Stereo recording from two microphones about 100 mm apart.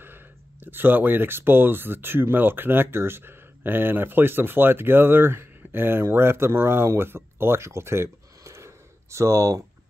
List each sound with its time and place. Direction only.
0.0 s speech: 20° right (ahead or behind)